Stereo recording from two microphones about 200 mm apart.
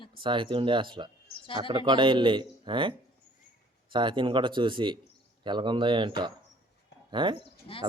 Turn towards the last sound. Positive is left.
turn(degrees=25)  # may be behind; listen again after turning